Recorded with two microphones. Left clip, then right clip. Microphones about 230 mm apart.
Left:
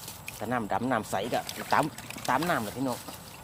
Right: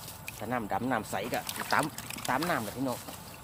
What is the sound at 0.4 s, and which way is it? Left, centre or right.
Speech, left.